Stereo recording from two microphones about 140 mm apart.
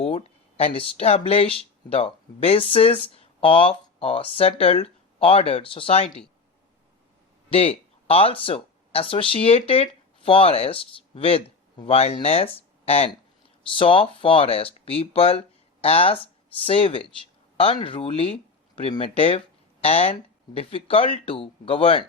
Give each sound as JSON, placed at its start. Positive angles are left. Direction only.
{"t": 0.0, "sound": "speech", "side_deg": 45}
{"t": 8.0, "sound": "speech", "side_deg": 45}
{"t": 12.5, "sound": "a sound", "side_deg": 45}
{"t": 13.7, "sound": "speech", "side_deg": 40}